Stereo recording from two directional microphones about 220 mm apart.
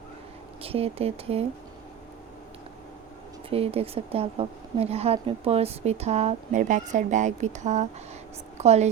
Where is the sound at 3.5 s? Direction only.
25° right (ahead or behind).